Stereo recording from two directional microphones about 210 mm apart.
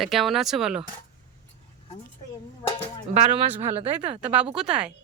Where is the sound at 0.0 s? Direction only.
Centre (ahead or behind).